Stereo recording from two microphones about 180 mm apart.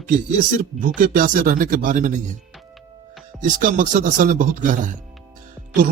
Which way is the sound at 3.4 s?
45° right (ahead or behind).